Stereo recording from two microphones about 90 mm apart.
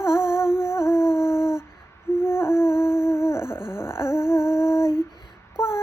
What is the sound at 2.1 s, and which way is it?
Humming, 30° left (ahead or behind).